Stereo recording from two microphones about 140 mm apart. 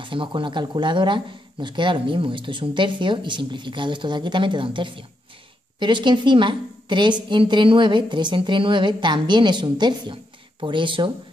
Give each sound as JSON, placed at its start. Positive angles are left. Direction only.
{"t": 0.0, "sound": "speech", "side_deg": -35}